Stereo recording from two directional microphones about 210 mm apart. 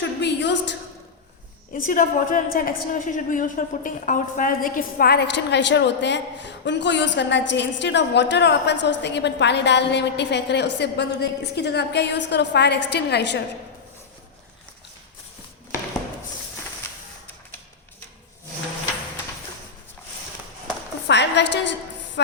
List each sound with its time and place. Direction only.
0.0 s a woman's voice: 55° left (ahead or behind)
1.7 s a woman's voice: 40° left (ahead or behind)
21.1 s a sound: 55° left (ahead or behind)